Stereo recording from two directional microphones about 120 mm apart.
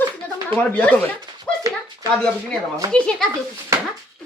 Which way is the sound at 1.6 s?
30° right (ahead or behind).